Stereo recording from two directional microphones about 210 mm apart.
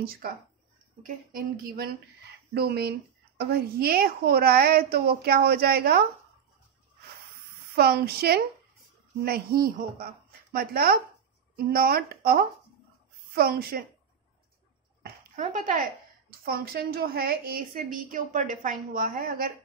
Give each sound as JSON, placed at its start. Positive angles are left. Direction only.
{"t": 0.0, "sound": "a woman's voice", "side_deg": -45}
{"t": 7.7, "sound": "a woman's voice", "side_deg": -50}
{"t": 15.0, "sound": "a sound", "side_deg": -40}
{"t": 16.4, "sound": "a woman's voice", "side_deg": -45}